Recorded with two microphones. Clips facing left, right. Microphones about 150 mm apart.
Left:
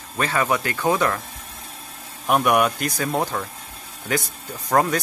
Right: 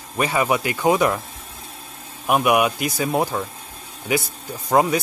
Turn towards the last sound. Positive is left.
turn(degrees=-10)  # may be behind; listen again after turning